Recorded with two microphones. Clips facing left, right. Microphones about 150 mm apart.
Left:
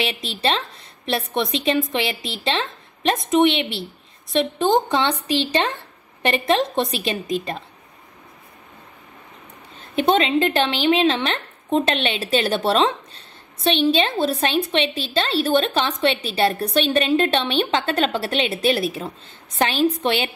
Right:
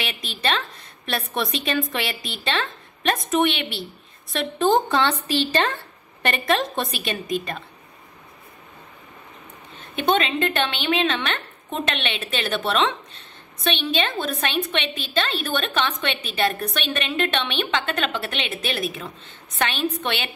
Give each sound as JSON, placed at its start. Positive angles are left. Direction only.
{"t": 0.0, "sound": "a woman's voice", "side_deg": 30}
{"t": 9.8, "sound": "a woman's voice", "side_deg": 30}